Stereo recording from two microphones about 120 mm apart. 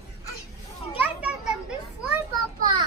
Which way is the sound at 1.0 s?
10° right (ahead or behind).